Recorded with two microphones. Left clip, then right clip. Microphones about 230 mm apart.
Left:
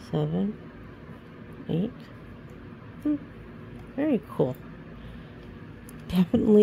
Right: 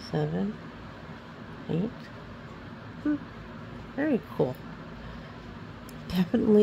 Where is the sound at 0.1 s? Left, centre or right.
Left.